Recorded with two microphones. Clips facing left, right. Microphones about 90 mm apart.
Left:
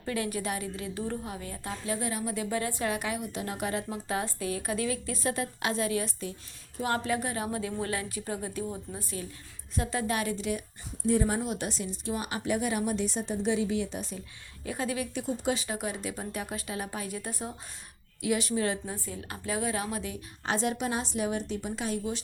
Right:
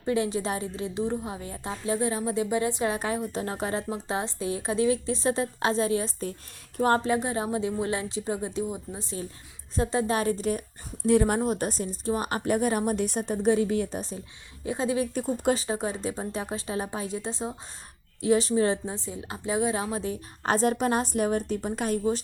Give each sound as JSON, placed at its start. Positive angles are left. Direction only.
{"t": 0.0, "sound": "a woman's voice", "side_deg": -25}
{"t": 11.0, "sound": "speech", "side_deg": -65}
{"t": 11.3, "sound": "a woman's voice", "side_deg": -45}
{"t": 14.6, "sound": "a woman's voice", "side_deg": -25}
{"t": 15.1, "sound": "a woman's voice", "side_deg": -40}